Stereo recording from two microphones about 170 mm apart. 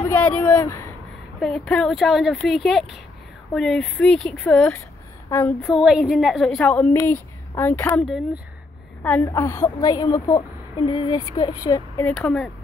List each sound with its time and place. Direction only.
0.1 s a woman's voice: 10° left (ahead or behind)
12.0 s speech: 5° left (ahead or behind)